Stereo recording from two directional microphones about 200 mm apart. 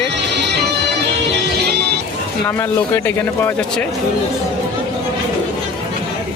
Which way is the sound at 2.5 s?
10° left (ahead or behind).